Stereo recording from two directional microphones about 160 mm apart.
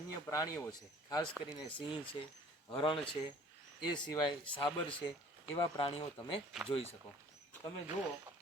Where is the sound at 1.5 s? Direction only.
30° left (ahead or behind).